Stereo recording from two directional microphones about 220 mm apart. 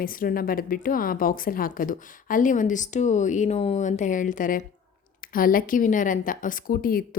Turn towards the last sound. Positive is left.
turn(degrees=40)  # may be behind; listen again after turning